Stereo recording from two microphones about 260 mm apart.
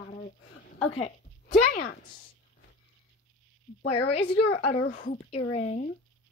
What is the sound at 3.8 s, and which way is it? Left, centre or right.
Speech, left.